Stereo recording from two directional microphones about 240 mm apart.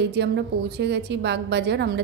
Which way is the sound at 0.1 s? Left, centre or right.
Right.